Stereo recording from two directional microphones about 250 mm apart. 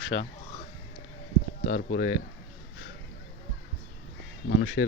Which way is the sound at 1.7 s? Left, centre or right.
Left.